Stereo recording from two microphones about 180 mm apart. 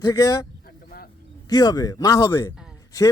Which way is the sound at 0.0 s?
20° left (ahead or behind).